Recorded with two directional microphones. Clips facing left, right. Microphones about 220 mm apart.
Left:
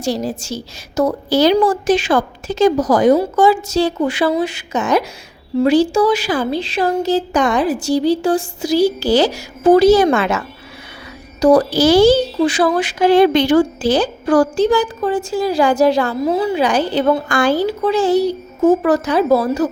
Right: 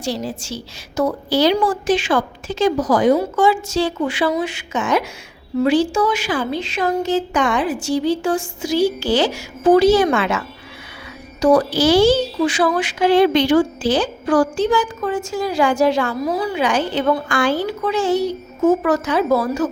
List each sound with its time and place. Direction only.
0.0 s a woman's voice: 45° left (ahead or behind)
16.2 s a woman's voice: 25° left (ahead or behind)
16.6 s a woman's voice: 35° left (ahead or behind)